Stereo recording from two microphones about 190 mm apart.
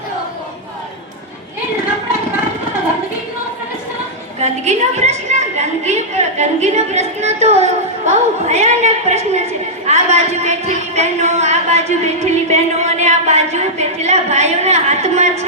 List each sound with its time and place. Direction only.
4.4 s a woman's voice: 35° right (ahead or behind)